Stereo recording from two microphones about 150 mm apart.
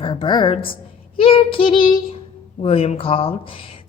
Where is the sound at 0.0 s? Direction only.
35° left (ahead or behind).